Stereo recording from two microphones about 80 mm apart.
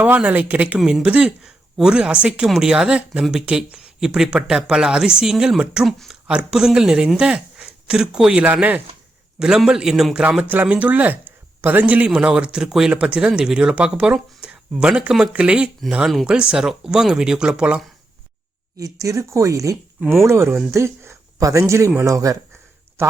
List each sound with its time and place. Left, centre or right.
0.0 s speech: centre
10.5 s speech: centre
18.8 s speech: right
23.0 s speech: right